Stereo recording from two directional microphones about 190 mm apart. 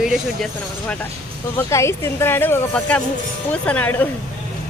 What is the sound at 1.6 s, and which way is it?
A woman's voice, 15° left (ahead or behind).